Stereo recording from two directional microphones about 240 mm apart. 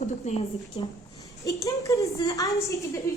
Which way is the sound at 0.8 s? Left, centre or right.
Centre.